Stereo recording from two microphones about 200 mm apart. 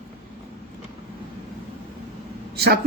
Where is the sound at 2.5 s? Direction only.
55° right (ahead or behind).